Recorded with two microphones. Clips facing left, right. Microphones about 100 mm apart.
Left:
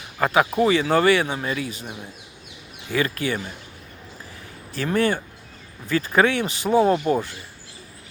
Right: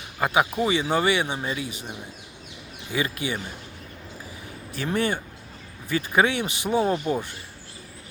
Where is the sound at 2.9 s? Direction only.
20° right (ahead or behind).